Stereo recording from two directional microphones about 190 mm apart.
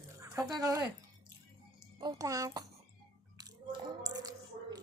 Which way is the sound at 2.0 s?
20° right (ahead or behind).